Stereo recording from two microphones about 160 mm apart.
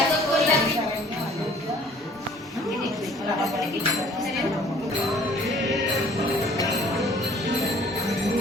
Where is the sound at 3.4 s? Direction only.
Centre (ahead or behind).